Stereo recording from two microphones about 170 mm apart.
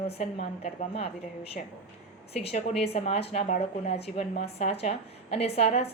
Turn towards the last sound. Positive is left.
turn(degrees=35)  # may be behind; listen again after turning